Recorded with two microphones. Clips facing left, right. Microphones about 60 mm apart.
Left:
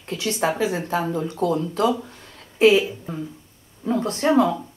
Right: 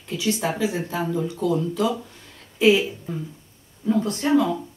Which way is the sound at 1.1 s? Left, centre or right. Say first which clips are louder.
Left 1 dB; left.